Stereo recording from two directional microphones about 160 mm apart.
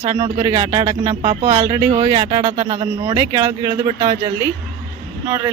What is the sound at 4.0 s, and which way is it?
Speech, 35° right (ahead or behind).